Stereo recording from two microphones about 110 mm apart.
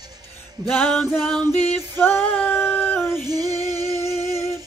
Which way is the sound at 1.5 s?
20° left (ahead or behind).